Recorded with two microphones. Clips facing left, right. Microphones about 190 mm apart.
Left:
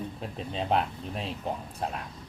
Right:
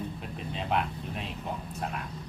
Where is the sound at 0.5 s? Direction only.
35° left (ahead or behind).